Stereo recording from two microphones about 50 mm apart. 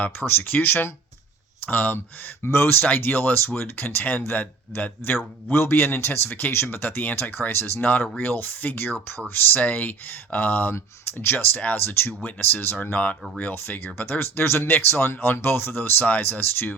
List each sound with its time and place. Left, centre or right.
0.3 s speech: left
2.4 s speech: left
9.6 s speech: left
12.9 s speech: left
13.5 s speech: left